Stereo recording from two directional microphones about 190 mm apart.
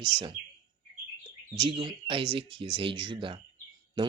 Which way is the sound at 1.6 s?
25° right (ahead or behind).